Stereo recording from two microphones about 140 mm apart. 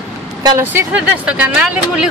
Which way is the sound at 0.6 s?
10° right (ahead or behind).